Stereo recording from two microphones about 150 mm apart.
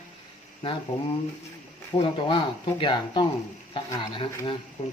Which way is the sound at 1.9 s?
35° left (ahead or behind).